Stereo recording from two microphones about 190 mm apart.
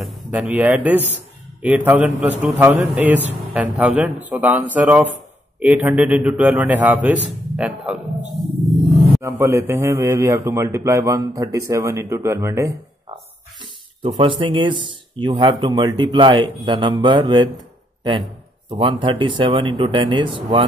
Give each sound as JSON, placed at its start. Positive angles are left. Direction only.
{"t": 0.0, "sound": "a man's voice", "side_deg": -10}
{"t": 9.2, "sound": "a man's voice", "side_deg": -15}
{"t": 13.6, "sound": "speech", "side_deg": -25}
{"t": 18.7, "sound": "speech", "side_deg": -25}